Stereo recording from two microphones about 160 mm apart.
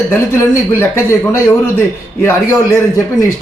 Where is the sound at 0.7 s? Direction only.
15° left (ahead or behind).